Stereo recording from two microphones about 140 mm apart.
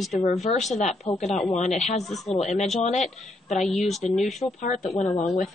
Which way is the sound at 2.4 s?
55° left (ahead or behind).